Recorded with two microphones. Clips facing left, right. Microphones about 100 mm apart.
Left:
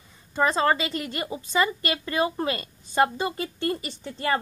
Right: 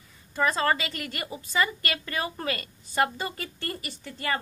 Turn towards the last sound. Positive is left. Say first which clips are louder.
# left 4 dB
turn(degrees=25)  # may be behind; listen again after turning